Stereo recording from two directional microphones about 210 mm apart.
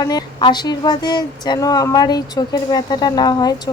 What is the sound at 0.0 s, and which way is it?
Speech, 20° left (ahead or behind).